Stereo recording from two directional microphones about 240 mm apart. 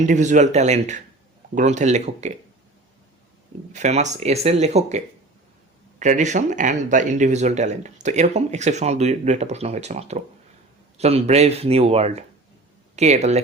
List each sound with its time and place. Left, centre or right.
0.0 s speech: right
3.7 s speech: right